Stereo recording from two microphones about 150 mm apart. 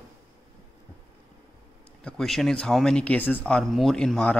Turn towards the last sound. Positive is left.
turn(degrees=5)  # may be behind; listen again after turning